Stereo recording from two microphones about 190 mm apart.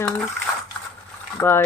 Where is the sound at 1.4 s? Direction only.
10° left (ahead or behind).